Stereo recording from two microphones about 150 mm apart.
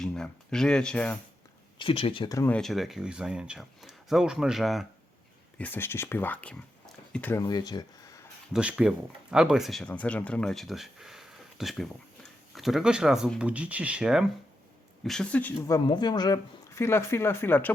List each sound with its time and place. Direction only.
0.0 s speech: 5° left (ahead or behind)
1.8 s speech: 40° left (ahead or behind)
2.5 s speech: 5° left (ahead or behind)
5.5 s speech: 10° left (ahead or behind)
7.3 s speech: 25° left (ahead or behind)
8.5 s speech: 5° right (ahead or behind)
15.6 s speech: 25° left (ahead or behind)